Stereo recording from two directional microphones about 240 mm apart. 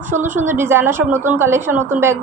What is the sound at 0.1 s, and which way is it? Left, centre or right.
A woman's voice, centre.